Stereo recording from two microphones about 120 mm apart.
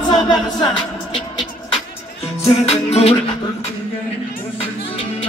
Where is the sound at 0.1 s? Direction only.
35° left (ahead or behind).